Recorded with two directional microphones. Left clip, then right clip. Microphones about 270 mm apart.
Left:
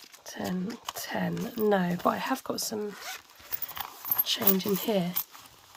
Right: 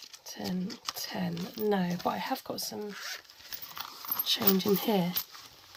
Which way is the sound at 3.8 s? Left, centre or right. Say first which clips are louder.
Left 1 dB; centre.